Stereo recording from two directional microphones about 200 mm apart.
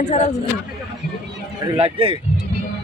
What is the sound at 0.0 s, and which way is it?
Speech, 35° left (ahead or behind).